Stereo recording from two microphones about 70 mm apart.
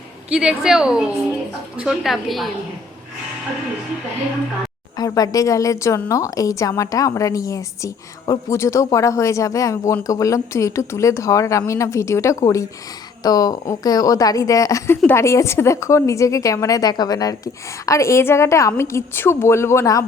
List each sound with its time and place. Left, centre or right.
0.3 s a woman's voice: centre
2.0 s a woman's voice: centre
4.9 s a woman's voice: left
13.2 s a woman's voice: left